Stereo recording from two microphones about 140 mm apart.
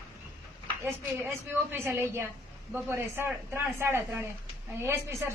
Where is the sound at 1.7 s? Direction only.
15° right (ahead or behind).